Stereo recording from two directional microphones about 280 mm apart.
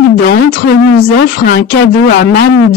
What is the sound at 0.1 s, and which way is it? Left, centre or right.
Speech, left.